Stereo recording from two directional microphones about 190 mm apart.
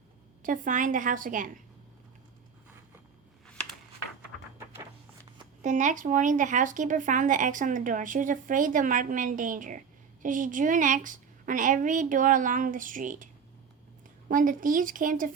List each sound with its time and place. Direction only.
0.4 s speech: 45° right (ahead or behind)
3.4 s a sound: 5° left (ahead or behind)
5.6 s speech: 40° right (ahead or behind)
14.3 s speech: 45° right (ahead or behind)